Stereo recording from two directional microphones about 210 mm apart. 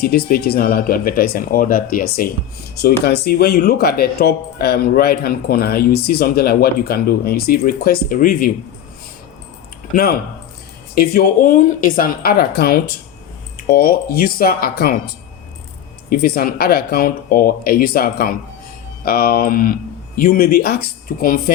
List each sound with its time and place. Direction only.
0.0 s speech: 45° left (ahead or behind)
9.9 s speech: 45° left (ahead or behind)
16.0 s speech: 45° left (ahead or behind)